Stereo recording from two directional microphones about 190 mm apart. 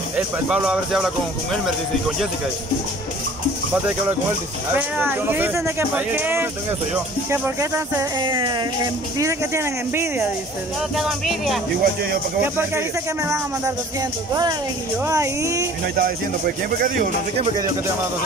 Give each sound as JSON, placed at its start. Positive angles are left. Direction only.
{"t": 0.1, "sound": "speech", "side_deg": -5}
{"t": 4.7, "sound": "speech", "side_deg": -10}
{"t": 8.2, "sound": "speech", "side_deg": -25}
{"t": 11.0, "sound": "speech", "side_deg": 0}
{"t": 11.8, "sound": "speech", "side_deg": -55}
{"t": 12.5, "sound": "speech", "side_deg": -15}
{"t": 15.0, "sound": "speech", "side_deg": -15}
{"t": 16.0, "sound": "speech", "side_deg": -50}